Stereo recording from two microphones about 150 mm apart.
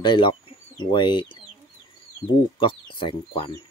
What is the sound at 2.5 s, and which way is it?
Speech, 35° left (ahead or behind).